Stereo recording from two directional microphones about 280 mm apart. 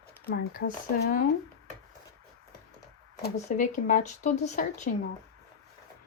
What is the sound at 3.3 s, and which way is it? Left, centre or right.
Speech, left.